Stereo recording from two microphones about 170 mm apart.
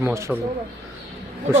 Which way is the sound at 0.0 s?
15° right (ahead or behind).